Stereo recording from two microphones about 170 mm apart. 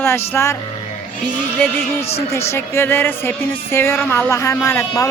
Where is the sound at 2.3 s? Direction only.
15° left (ahead or behind).